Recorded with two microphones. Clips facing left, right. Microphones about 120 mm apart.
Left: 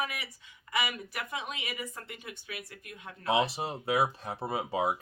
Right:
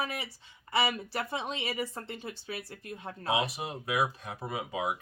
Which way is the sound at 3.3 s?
30° left (ahead or behind).